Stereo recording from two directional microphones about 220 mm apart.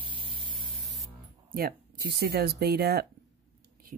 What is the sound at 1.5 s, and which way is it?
Speech, 45° right (ahead or behind).